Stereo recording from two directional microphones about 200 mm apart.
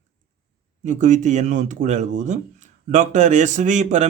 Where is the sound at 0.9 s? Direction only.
40° right (ahead or behind).